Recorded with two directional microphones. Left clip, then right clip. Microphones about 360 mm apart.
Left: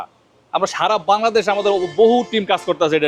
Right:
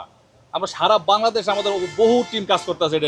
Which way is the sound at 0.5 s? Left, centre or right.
Left.